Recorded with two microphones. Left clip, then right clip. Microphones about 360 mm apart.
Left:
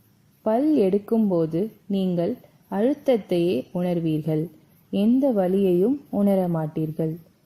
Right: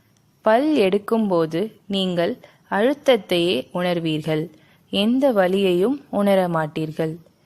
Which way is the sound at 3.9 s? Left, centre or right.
Right.